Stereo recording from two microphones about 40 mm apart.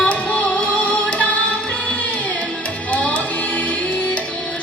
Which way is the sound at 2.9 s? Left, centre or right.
Left.